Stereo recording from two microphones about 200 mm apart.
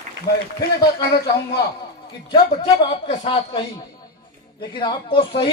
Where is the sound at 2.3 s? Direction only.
25° left (ahead or behind).